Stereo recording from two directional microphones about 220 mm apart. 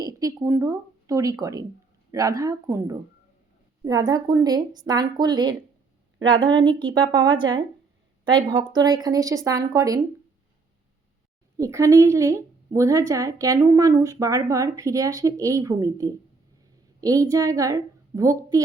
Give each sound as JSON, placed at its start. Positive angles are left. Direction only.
{"t": 0.0, "sound": "a woman's voice", "side_deg": -15}
{"t": 11.5, "sound": "a woman's voice", "side_deg": -15}